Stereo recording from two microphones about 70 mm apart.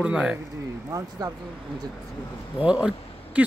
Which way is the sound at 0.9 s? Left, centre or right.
Right.